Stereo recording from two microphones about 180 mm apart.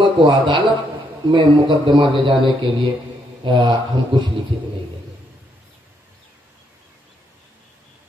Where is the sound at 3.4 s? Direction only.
25° right (ahead or behind).